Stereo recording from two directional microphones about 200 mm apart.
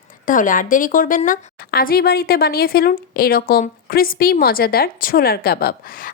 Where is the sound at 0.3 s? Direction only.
40° left (ahead or behind).